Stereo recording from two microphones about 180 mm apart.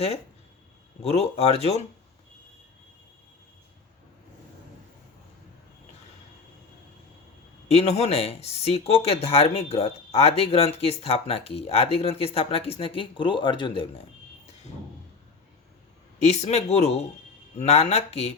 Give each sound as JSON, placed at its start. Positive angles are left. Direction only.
{"t": 1.0, "sound": "speech", "side_deg": 35}
{"t": 7.7, "sound": "speech", "side_deg": 35}
{"t": 16.2, "sound": "speech", "side_deg": 40}